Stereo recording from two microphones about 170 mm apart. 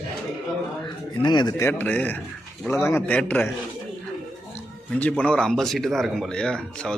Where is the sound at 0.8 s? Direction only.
25° left (ahead or behind); by 3.5 s 10° left (ahead or behind).